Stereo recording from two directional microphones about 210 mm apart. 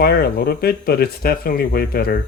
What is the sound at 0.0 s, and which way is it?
Speech, 45° left (ahead or behind).